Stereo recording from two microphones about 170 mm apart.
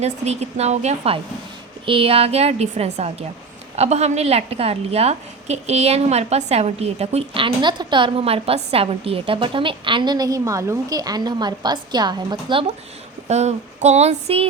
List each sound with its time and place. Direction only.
0.0 s a woman's voice: 40° right (ahead or behind)
13.2 s a woman's voice: 40° right (ahead or behind)